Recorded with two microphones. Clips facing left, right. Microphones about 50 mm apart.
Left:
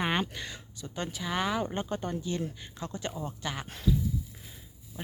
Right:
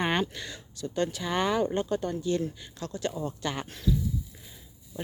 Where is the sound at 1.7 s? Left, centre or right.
Centre.